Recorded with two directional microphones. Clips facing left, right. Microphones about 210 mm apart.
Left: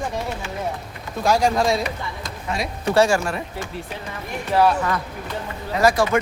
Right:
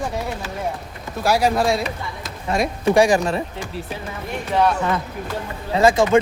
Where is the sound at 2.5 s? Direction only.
45° right (ahead or behind).